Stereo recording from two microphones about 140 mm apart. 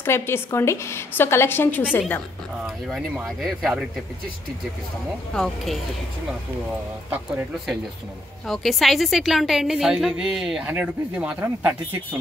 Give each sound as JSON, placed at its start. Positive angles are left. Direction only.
{"t": 0.0, "sound": "a woman's voice", "side_deg": 20}
{"t": 2.6, "sound": "a woman's voice", "side_deg": 0}
{"t": 5.3, "sound": "a woman's voice", "side_deg": 0}
{"t": 8.5, "sound": "a woman's voice", "side_deg": 0}